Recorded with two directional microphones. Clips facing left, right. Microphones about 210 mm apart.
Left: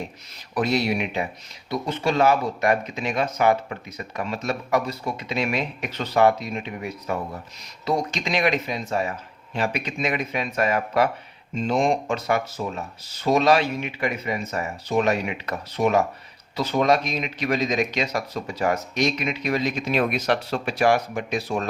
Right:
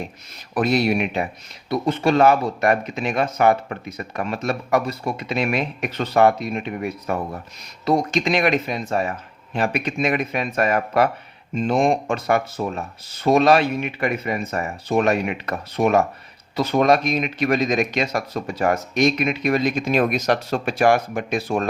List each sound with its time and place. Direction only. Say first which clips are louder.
0.5 s speech: right 3 dB; 55° right (ahead or behind)